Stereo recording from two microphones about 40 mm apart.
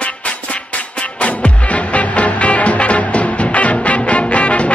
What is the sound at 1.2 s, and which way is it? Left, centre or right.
Music, left.